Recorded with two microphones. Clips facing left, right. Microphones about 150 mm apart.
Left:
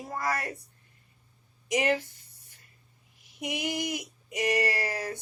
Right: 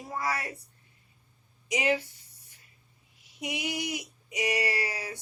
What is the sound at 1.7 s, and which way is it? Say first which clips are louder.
Speech: left 1 dB; 50° left (ahead or behind).